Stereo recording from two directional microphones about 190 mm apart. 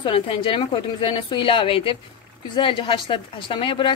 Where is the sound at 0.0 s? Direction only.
25° left (ahead or behind).